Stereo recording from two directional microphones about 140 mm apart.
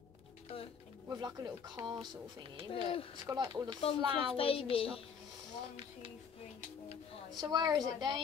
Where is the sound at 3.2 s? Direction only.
25° right (ahead or behind).